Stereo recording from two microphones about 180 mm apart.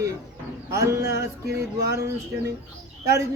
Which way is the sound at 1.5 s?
65° right (ahead or behind).